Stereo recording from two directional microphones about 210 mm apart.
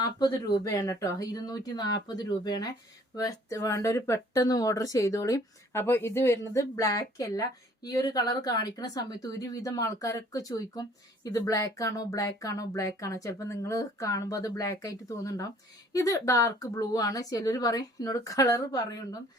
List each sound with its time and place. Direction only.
0.0 s speech: 20° left (ahead or behind)